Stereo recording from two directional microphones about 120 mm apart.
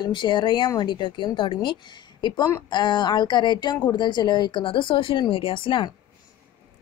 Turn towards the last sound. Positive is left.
turn(degrees=40)  # may be behind; listen again after turning